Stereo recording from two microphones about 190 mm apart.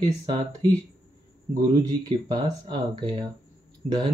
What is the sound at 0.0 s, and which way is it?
Speech, 25° right (ahead or behind).